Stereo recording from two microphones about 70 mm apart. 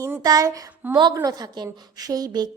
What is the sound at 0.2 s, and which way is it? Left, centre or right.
A woman's voice, right.